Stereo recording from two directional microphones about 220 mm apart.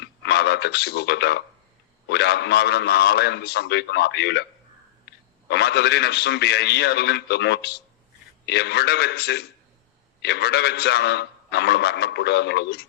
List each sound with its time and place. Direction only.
0.0 s a sound: 50° left (ahead or behind)
2.0 s a man's voice: 50° left (ahead or behind)
5.5 s a man's voice: 50° left (ahead or behind)